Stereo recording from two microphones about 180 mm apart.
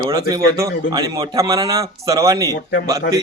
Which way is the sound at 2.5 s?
65° left (ahead or behind).